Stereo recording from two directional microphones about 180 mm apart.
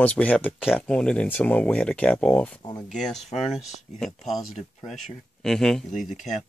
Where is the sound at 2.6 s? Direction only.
20° left (ahead or behind).